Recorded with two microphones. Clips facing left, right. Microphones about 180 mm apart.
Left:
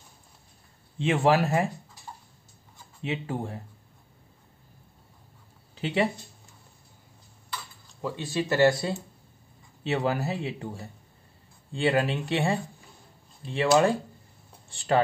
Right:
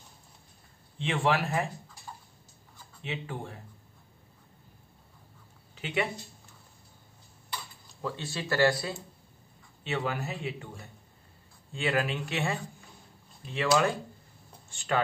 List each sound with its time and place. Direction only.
0.9 s a man's voice: 40° left (ahead or behind)
3.0 s a man's voice: 35° left (ahead or behind)
5.8 s speech: 35° left (ahead or behind)
8.0 s speech: 15° left (ahead or behind)
9.8 s a man's voice: 40° left (ahead or behind)